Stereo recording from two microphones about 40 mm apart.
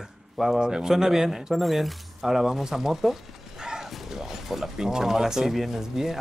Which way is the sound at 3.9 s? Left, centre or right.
Centre.